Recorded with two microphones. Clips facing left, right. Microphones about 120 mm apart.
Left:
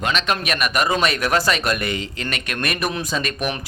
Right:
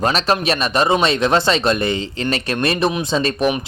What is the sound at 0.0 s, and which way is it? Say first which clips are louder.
Speech: right 5 dB; 35° right (ahead or behind).